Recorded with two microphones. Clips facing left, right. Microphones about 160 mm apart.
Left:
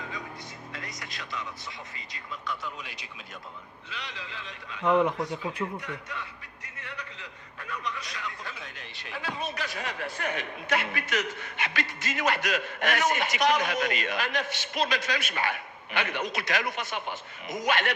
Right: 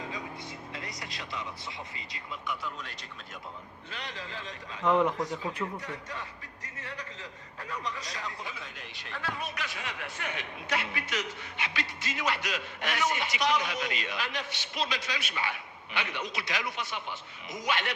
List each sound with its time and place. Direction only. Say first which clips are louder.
0.7 s a sound: even; 30° right (ahead or behind)
3.8 s a man's voice: right 1 dB; 45° right (ahead or behind)
4.8 s a man's voice: left 2 dB; 5° left (ahead or behind)
5.8 s a man's voice: left 1 dB; 35° right (ahead or behind)
8.5 s a man's voice: left 1 dB; centre (ahead or behind)
9.1 s a man's voice: left 1 dB; 15° left (ahead or behind)
9.4 s a man's voice: left 4 dB; 40° left (ahead or behind)